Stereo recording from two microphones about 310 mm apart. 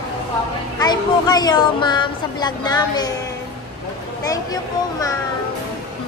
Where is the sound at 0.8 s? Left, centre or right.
Centre.